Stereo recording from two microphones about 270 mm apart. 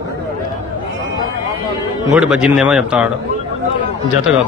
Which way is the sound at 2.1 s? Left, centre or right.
Centre.